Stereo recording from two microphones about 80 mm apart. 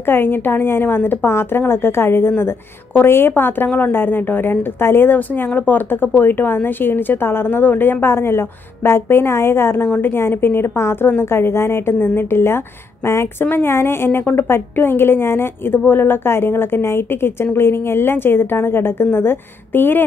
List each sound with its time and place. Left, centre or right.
0.0 s a woman's voice: left